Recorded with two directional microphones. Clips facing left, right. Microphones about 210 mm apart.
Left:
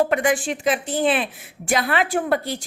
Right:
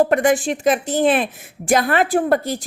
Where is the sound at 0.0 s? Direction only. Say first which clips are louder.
Right 4 dB; 40° right (ahead or behind).